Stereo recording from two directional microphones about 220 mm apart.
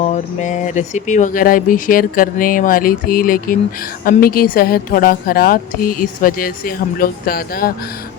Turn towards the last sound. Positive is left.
turn(degrees=40)  # may be behind; listen again after turning